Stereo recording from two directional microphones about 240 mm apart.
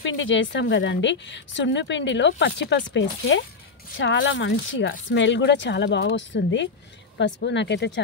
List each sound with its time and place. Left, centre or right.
0.0 s speech: left